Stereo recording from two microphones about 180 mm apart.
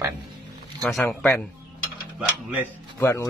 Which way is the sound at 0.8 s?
5° left (ahead or behind).